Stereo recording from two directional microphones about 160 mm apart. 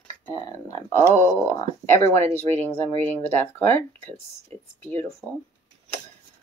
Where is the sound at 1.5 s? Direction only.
15° left (ahead or behind).